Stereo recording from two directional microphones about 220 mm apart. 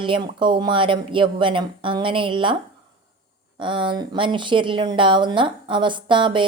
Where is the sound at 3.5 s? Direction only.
20° right (ahead or behind).